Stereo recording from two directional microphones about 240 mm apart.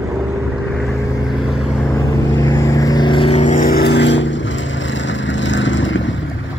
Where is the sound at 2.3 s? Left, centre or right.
Centre; by 6.1 s left.